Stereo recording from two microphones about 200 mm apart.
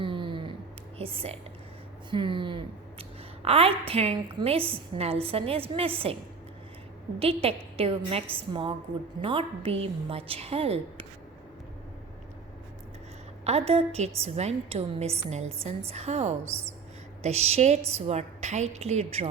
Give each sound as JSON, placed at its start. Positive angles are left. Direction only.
{"t": 0.0, "sound": "a sound", "side_deg": -25}
{"t": 0.9, "sound": "a woman's voice", "side_deg": -30}
{"t": 7.2, "sound": "a woman's voice", "side_deg": -30}
{"t": 13.4, "sound": "a woman's voice", "side_deg": -30}